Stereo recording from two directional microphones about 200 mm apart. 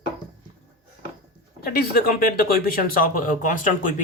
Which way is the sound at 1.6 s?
50° left (ahead or behind).